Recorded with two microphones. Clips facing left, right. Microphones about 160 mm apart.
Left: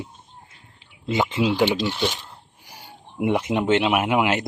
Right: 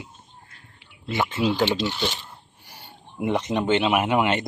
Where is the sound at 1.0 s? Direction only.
20° left (ahead or behind).